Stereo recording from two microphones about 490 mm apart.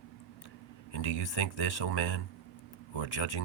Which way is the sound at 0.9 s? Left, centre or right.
Left.